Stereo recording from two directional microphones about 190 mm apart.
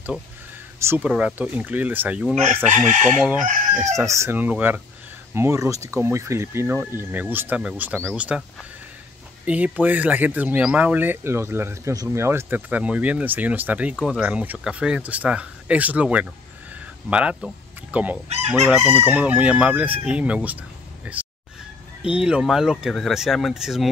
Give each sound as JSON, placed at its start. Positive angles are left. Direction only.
{"t": 0.7, "sound": "speech", "side_deg": -10}
{"t": 2.9, "sound": "chicken", "side_deg": -40}
{"t": 3.8, "sound": "speech", "side_deg": -15}
{"t": 9.5, "sound": "speech", "side_deg": -10}
{"t": 21.0, "sound": "a sound", "side_deg": -10}
{"t": 22.0, "sound": "speech", "side_deg": -5}